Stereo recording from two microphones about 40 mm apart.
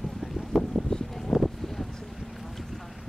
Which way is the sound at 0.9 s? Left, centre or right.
Centre.